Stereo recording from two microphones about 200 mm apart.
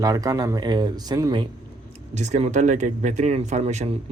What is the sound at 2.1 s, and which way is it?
Speech, 35° right (ahead or behind).